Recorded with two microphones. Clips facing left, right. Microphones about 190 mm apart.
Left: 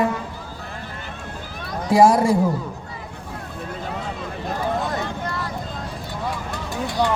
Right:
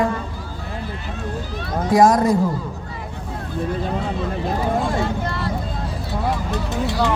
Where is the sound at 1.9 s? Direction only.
10° left (ahead or behind).